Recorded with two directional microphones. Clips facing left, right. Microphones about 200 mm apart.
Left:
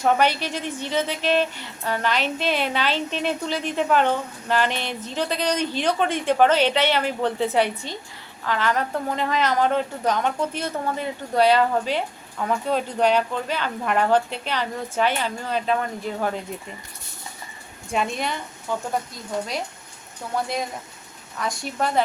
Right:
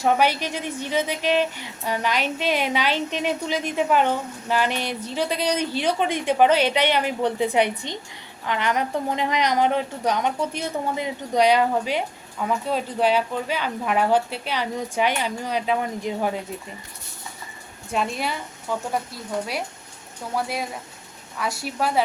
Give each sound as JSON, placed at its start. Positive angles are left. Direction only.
{"t": 0.0, "sound": "a woman's voice", "side_deg": -10}
{"t": 17.9, "sound": "a woman's voice", "side_deg": 0}
{"t": 20.3, "sound": "a woman's voice", "side_deg": -5}